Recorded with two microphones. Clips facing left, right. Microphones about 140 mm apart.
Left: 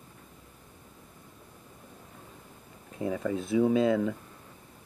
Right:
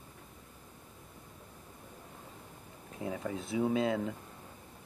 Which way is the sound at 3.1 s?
75° left (ahead or behind).